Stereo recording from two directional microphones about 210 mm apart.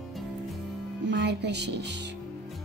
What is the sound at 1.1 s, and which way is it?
Speech, 55° right (ahead or behind).